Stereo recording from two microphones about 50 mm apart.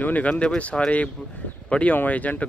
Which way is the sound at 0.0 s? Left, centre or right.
Left.